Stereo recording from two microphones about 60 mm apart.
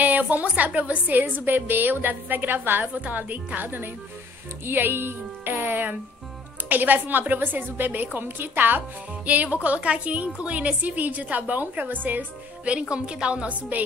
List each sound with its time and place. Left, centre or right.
0.0 s a woman's voice: right